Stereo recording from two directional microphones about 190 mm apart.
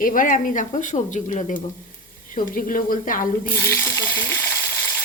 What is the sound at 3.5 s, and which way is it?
Speech, 10° left (ahead or behind).